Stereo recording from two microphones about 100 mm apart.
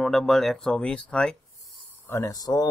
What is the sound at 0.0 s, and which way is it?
Speech, centre (ahead or behind).